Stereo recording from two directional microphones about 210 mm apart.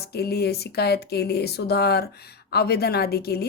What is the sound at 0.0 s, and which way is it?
A woman's voice, 50° left (ahead or behind).